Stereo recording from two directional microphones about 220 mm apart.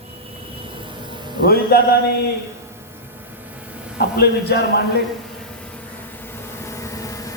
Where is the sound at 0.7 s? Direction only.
20° right (ahead or behind).